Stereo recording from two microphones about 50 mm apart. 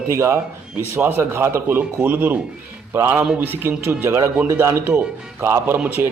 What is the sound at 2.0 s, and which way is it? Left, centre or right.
Speech, right.